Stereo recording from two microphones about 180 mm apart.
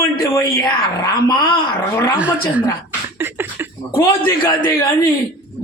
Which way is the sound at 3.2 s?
10° right (ahead or behind).